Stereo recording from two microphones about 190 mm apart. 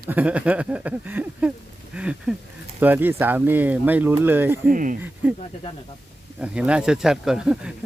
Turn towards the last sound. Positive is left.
turn(degrees=-5)  # may be behind; listen again after turning